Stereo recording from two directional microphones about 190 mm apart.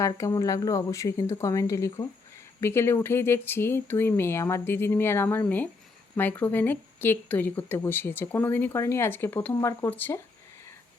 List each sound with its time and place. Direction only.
0.0 s speech: 15° left (ahead or behind)